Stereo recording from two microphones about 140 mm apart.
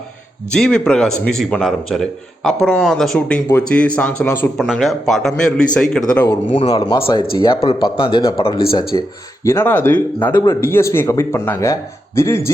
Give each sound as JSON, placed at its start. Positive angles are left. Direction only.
{"t": 0.5, "sound": "a man's voice", "side_deg": 5}
{"t": 3.2, "sound": "speech", "side_deg": 10}
{"t": 4.5, "sound": "a man's voice", "side_deg": 0}
{"t": 6.5, "sound": "speech", "side_deg": 40}
{"t": 6.7, "sound": "speech", "side_deg": 25}
{"t": 8.9, "sound": "speech", "side_deg": 30}
{"t": 9.4, "sound": "speech", "side_deg": 20}